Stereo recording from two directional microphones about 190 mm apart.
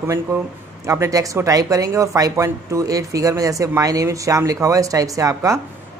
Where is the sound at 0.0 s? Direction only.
15° right (ahead or behind).